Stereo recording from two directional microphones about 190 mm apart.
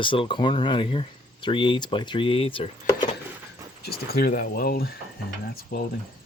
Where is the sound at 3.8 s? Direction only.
55° left (ahead or behind).